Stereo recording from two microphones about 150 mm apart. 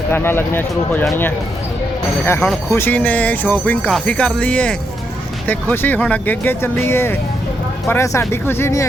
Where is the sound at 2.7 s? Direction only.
15° left (ahead or behind).